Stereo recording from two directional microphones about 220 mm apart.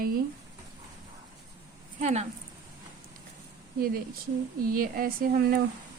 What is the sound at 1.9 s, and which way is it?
Speech, 30° right (ahead or behind).